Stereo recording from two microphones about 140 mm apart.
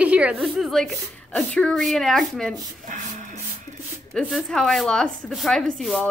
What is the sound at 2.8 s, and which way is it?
Music, 65° right (ahead or behind).